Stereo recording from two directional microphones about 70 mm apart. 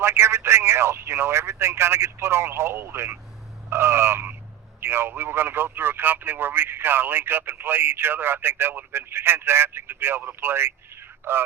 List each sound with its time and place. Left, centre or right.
0.0 s speech: right